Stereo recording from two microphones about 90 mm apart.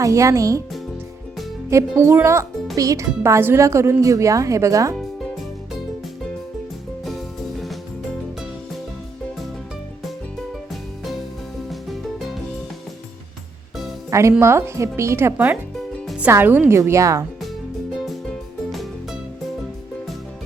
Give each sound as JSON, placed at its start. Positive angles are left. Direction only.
{"t": 0.0, "sound": "speech", "side_deg": -35}
{"t": 1.7, "sound": "speech", "side_deg": -30}
{"t": 11.7, "sound": "music", "side_deg": 0}
{"t": 14.1, "sound": "a woman's voice", "side_deg": -35}
{"t": 17.9, "sound": "music", "side_deg": 0}